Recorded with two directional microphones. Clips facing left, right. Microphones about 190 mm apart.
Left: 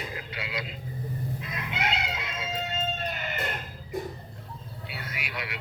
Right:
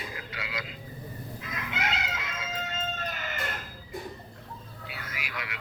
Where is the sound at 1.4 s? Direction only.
25° left (ahead or behind).